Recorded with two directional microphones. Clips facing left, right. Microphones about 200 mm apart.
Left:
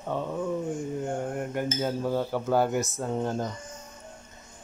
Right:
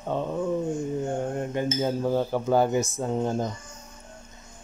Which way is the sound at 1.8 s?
20° right (ahead or behind).